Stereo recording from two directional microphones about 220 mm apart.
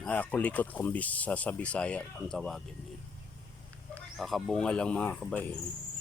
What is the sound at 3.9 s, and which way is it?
Speech, centre (ahead or behind).